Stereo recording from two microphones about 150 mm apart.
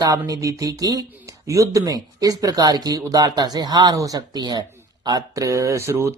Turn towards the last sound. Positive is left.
turn(degrees=-20)  # may be behind; listen again after turning